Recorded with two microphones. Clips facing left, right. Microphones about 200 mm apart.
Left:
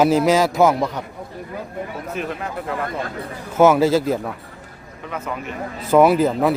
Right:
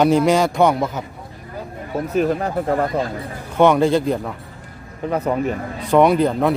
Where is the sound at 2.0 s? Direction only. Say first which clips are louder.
Right 11 dB; 40° right (ahead or behind).